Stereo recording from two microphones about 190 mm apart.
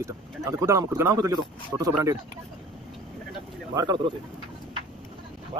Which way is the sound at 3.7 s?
20° right (ahead or behind).